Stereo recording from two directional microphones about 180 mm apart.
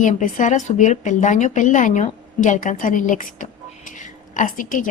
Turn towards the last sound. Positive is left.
turn(degrees=50)  # may be behind; listen again after turning